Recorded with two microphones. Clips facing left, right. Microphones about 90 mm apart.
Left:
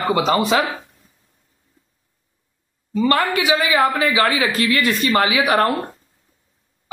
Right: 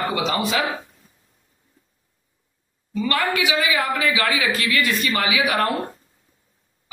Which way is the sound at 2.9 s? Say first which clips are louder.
Left 4 dB; 35° left (ahead or behind).